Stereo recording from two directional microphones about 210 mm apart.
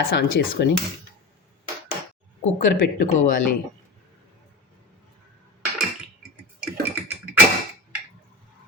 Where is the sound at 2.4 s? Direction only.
40° left (ahead or behind).